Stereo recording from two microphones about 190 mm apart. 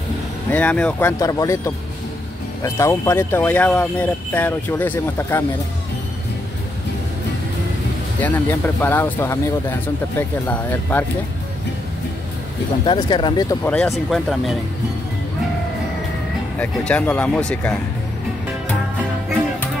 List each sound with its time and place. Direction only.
0.5 s speech: 5° left (ahead or behind)
8.2 s speech: 10° left (ahead or behind)
12.8 s speech: 25° left (ahead or behind)
13.7 s speech: 5° left (ahead or behind)
16.5 s speech: 5° left (ahead or behind)